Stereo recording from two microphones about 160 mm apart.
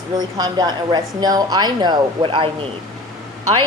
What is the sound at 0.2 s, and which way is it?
A woman's voice, 25° right (ahead or behind).